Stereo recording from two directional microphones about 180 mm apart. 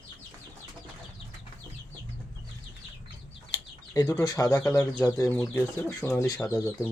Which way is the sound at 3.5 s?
20° left (ahead or behind).